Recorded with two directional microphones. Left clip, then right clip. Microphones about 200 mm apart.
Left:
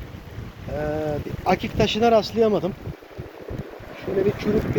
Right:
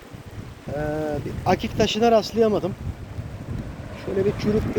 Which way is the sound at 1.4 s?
10° right (ahead or behind).